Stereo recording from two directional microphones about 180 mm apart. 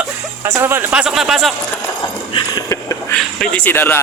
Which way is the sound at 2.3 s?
25° left (ahead or behind).